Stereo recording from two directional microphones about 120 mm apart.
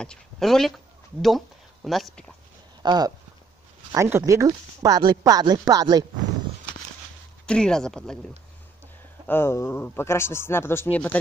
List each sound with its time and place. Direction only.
0.0 s speech: 5° left (ahead or behind)
2.8 s speech: 35° right (ahead or behind)
7.4 s speech: 5° left (ahead or behind)
9.3 s speech: 20° left (ahead or behind)